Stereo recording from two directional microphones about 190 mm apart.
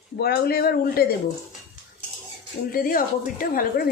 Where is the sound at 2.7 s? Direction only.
50° left (ahead or behind).